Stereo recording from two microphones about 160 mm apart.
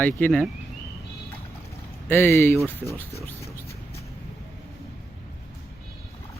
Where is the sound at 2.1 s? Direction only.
15° left (ahead or behind).